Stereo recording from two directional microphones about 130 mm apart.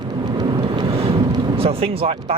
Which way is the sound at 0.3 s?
35° right (ahead or behind).